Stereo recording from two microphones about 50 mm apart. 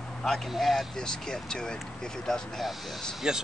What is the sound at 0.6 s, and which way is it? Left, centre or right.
Speech, centre.